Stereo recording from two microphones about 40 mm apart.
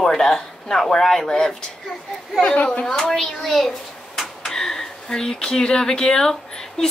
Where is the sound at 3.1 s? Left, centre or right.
Centre.